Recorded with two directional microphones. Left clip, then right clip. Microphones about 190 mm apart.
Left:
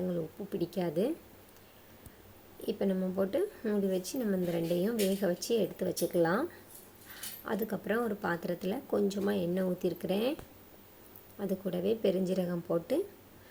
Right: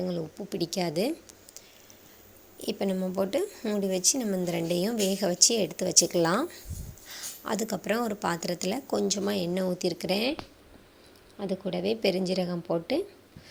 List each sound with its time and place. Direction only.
0.1 s a woman's voice: 15° right (ahead or behind)
2.6 s a woman's voice: 15° right (ahead or behind)
7.4 s a woman's voice: 15° right (ahead or behind)
11.3 s a woman's voice: 10° right (ahead or behind)